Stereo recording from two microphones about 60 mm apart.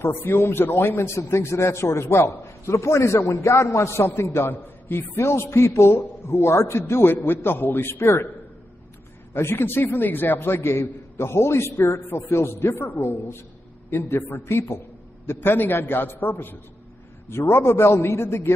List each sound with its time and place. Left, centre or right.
0.0 s a man's voice: left
4.2 s a man's voice: left
5.2 s a man's voice: left
6.9 s a man's voice: left
7.9 s a man's voice: left
9.3 s a man's voice: left
17.3 s a man's voice: left